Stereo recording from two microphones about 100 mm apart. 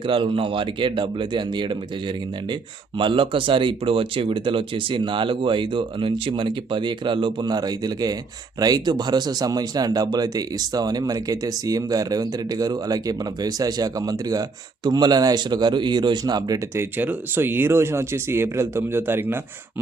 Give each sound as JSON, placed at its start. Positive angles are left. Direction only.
{"t": 0.1, "sound": "speech", "side_deg": -65}
{"t": 3.0, "sound": "speech", "side_deg": -60}
{"t": 16.7, "sound": "speech", "side_deg": -20}